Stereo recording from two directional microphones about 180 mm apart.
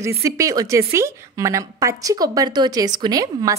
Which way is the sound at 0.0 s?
15° right (ahead or behind).